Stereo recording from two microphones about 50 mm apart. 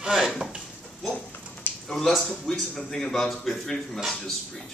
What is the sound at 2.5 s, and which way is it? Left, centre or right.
Speech, centre.